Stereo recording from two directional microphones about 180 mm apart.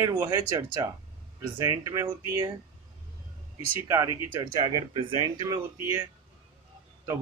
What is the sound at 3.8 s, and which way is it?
Speech, 15° right (ahead or behind).